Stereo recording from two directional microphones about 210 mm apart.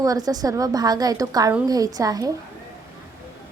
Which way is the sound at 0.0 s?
15° right (ahead or behind).